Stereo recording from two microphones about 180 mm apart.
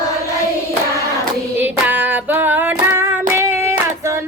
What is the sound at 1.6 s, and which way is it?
Child singing, 10° right (ahead or behind).